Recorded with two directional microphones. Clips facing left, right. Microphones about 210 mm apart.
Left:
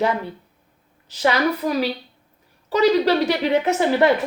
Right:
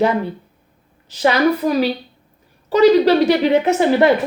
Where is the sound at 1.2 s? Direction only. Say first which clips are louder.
Right 5 dB; 25° right (ahead or behind).